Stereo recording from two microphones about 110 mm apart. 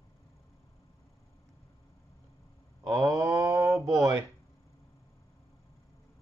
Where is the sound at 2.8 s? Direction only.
30° right (ahead or behind).